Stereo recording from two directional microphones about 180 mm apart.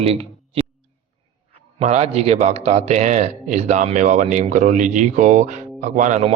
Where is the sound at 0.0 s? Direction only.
35° right (ahead or behind).